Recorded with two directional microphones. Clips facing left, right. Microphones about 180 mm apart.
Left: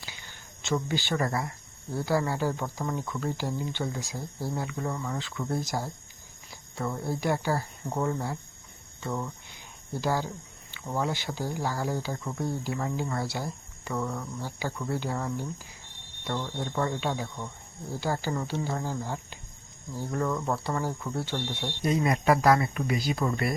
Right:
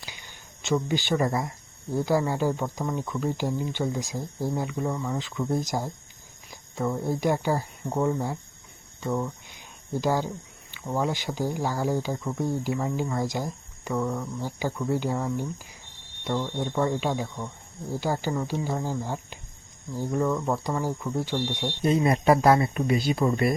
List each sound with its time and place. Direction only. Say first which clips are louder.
0.0 s speech: right 1 dB; 15° right (ahead or behind)
9.0 s a sound: right 5 dB; 10° right (ahead or behind)
10.8 s speech: right 3 dB; 15° right (ahead or behind)
21.8 s speech: right 3 dB; 30° right (ahead or behind)